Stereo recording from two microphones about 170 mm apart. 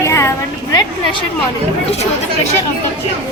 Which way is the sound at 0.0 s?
15° left (ahead or behind).